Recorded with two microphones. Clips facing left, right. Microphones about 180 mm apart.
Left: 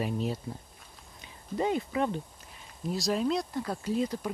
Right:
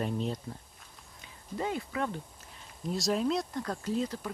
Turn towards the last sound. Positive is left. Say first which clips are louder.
# left 2 dB
turn(degrees=10)  # may be behind; listen again after turning